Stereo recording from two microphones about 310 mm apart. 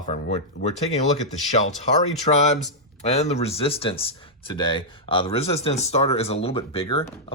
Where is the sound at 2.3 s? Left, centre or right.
Left.